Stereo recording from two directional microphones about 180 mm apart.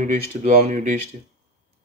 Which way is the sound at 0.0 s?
45° right (ahead or behind).